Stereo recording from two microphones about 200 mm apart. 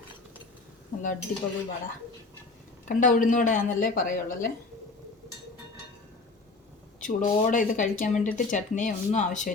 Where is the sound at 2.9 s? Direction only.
40° left (ahead or behind).